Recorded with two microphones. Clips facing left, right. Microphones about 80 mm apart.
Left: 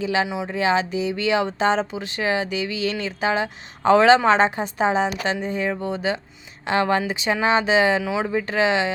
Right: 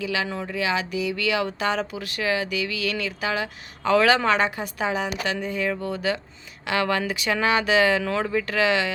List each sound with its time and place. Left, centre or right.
0.0 s speech: left
8.0 s speech: centre
8.3 s speech: left